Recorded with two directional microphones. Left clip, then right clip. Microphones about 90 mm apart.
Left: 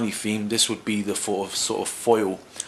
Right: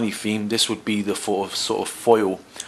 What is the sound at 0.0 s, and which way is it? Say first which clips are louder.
Speech: right 2 dB; 20° right (ahead or behind).